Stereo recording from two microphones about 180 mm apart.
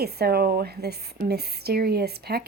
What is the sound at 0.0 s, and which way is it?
Speech, 60° right (ahead or behind).